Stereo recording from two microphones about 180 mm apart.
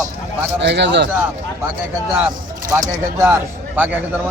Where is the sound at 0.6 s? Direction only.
75° right (ahead or behind).